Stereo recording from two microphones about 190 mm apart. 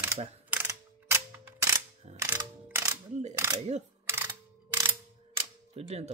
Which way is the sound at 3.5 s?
35° right (ahead or behind).